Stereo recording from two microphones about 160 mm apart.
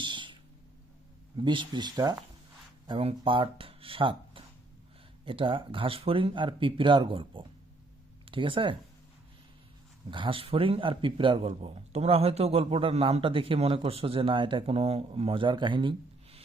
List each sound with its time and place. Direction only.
0.0 s a sound: 30° right (ahead or behind)
1.4 s a man's voice: 30° right (ahead or behind)
10.1 s a man's voice: 30° right (ahead or behind)